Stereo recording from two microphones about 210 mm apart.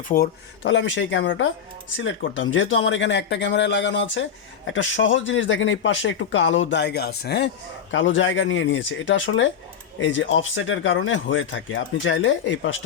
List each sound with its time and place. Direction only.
0.1 s speech: 40° left (ahead or behind)
0.6 s speech: 60° left (ahead or behind)